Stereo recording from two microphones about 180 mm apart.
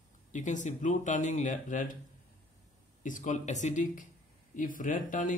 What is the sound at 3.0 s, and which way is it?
A man's voice, 45° left (ahead or behind).